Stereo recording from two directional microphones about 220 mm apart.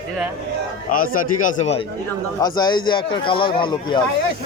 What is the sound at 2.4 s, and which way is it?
A man's voice, 20° left (ahead or behind).